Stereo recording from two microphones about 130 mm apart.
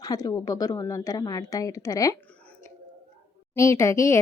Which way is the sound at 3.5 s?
25° left (ahead or behind).